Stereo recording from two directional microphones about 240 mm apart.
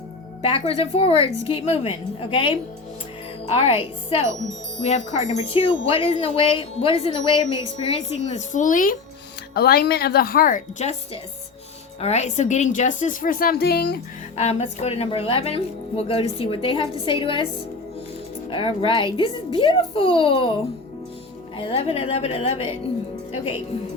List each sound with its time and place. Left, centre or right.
0.5 s a woman's voice: left
14.3 s a woman's voice: left
18.5 s a woman's voice: left